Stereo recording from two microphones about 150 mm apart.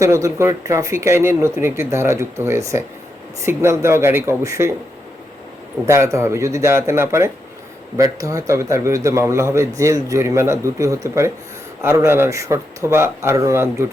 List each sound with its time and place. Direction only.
0.0 s a man's voice: 20° right (ahead or behind)
5.8 s a man's voice: 20° right (ahead or behind)